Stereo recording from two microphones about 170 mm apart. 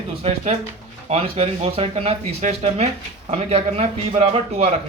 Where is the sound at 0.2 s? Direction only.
40° right (ahead or behind).